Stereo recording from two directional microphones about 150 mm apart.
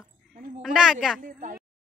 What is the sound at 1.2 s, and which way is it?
Speech, 60° right (ahead or behind).